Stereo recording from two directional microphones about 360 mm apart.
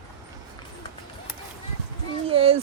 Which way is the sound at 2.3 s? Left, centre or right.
Centre.